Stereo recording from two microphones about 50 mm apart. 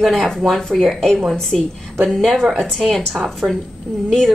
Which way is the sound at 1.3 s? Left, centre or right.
Centre.